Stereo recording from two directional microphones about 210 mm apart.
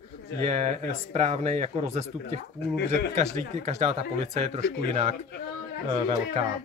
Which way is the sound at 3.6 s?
30° right (ahead or behind).